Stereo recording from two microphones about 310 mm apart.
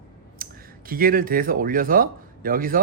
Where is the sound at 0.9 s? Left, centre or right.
Right.